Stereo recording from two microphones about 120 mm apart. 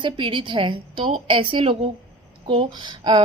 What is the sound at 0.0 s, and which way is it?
A woman's voice, 45° right (ahead or behind).